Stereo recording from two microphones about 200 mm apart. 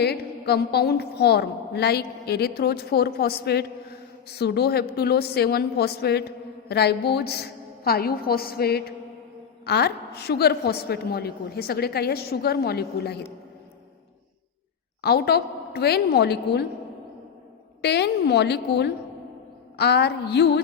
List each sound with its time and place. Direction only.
0.0 s a woman's voice: 55° left (ahead or behind)
15.0 s a woman's voice: 55° left (ahead or behind)
17.8 s a woman's voice: 55° left (ahead or behind)